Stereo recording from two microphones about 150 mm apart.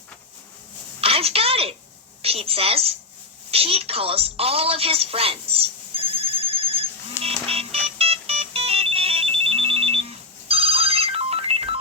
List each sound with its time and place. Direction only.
1.0 s a sound: 40° right (ahead or behind)
2.2 s a woman's voice: 40° right (ahead or behind)
7.2 s music: 40° right (ahead or behind)